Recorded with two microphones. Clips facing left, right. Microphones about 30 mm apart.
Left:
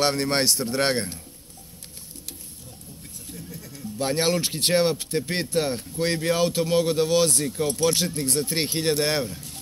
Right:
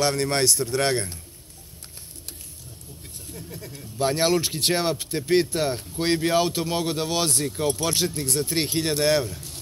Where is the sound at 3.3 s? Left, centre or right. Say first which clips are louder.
Right 2 dB; right.